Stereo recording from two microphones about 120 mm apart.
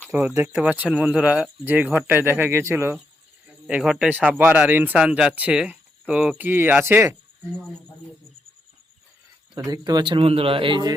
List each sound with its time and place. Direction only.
0.1 s speech: 15° right (ahead or behind)
3.7 s a man's voice: 5° right (ahead or behind); by 7.2 s 20° right (ahead or behind)
9.6 s speech: 30° right (ahead or behind)